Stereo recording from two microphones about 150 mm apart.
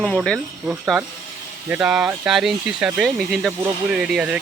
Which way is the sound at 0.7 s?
5° right (ahead or behind).